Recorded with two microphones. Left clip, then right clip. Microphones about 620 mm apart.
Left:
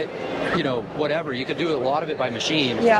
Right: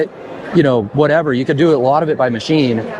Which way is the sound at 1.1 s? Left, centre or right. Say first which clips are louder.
Right 11 dB; right.